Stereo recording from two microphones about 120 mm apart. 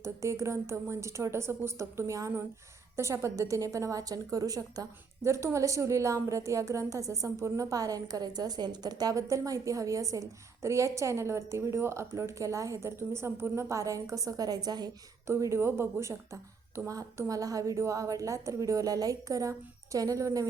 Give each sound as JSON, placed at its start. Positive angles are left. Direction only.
{"t": 0.0, "sound": "a woman's voice", "side_deg": -25}
{"t": 15.3, "sound": "a woman's voice", "side_deg": -25}